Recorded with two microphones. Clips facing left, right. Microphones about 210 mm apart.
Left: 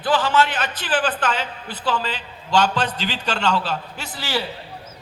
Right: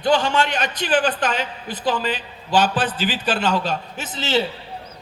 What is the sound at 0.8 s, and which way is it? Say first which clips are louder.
Speech: right 4 dB; 20° right (ahead or behind).